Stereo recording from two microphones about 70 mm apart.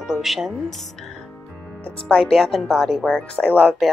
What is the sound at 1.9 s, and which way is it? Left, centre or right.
Speech, centre.